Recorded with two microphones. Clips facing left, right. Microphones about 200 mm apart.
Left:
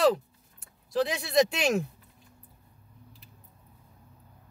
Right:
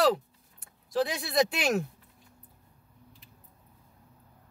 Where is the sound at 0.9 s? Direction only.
Centre (ahead or behind).